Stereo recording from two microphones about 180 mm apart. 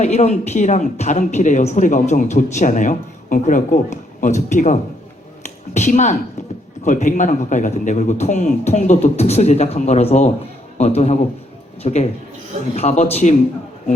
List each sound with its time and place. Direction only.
0.0 s a woman's voice: 40° left (ahead or behind)